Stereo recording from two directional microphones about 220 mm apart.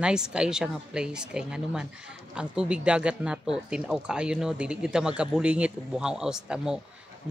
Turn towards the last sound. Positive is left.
turn(degrees=-5)  # may be behind; listen again after turning